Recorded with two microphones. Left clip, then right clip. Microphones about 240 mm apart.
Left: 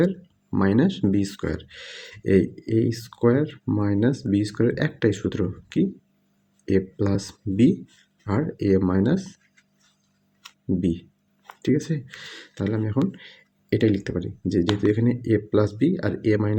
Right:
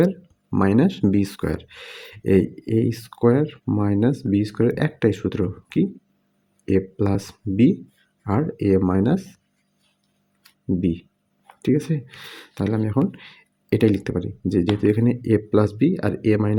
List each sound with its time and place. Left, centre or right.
0.5 s speech: centre
10.8 s speech: centre